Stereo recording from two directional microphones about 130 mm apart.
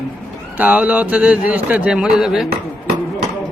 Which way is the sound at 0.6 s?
10° right (ahead or behind).